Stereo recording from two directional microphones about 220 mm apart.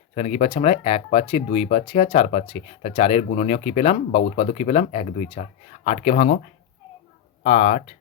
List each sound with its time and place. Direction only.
0.1 s speech: 30° left (ahead or behind)
7.4 s speech: 35° left (ahead or behind)